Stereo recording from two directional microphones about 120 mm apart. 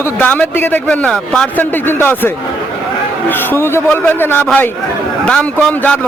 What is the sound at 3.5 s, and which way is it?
A man's voice, 20° left (ahead or behind).